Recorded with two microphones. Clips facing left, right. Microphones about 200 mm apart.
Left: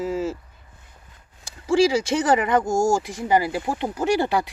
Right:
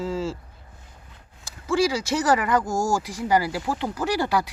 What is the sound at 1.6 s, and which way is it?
Speech, 30° left (ahead or behind).